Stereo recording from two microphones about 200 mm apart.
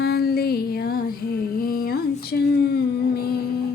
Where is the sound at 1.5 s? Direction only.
50° left (ahead or behind).